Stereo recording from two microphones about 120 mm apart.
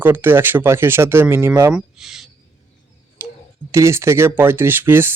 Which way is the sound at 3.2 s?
20° right (ahead or behind).